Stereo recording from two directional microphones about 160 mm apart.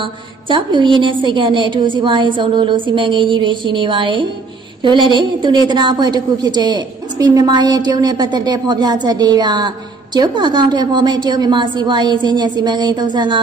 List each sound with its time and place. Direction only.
0.0 s a woman's voice: 30° right (ahead or behind)